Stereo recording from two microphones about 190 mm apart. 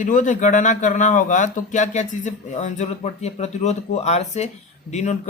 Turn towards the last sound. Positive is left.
turn(degrees=35)  # may be behind; listen again after turning